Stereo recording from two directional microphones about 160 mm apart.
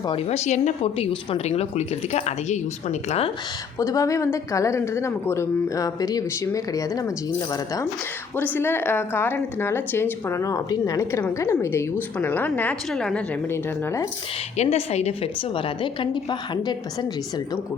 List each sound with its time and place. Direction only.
0.0 s a woman's voice: 30° left (ahead or behind)
0.3 s a woman's voice: 45° left (ahead or behind)
3.8 s speech: 20° left (ahead or behind)
8.4 s a woman's voice: 10° left (ahead or behind)
13.5 s a woman's voice: 15° left (ahead or behind)
14.5 s a woman's voice: 40° left (ahead or behind); by 17.6 s 25° left (ahead or behind)